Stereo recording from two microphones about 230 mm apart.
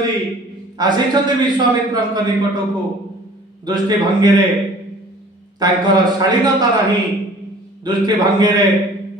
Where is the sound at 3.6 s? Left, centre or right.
Centre.